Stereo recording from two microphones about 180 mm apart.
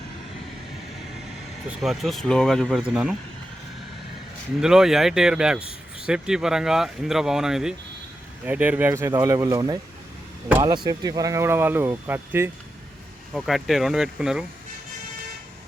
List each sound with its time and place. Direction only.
1.8 s speech: centre (ahead or behind)
4.6 s speech: 5° right (ahead or behind)
13.3 s speech: centre (ahead or behind)